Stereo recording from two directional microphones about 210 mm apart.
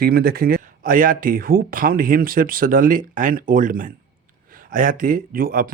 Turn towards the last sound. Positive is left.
turn(degrees=-40)  # may be behind; listen again after turning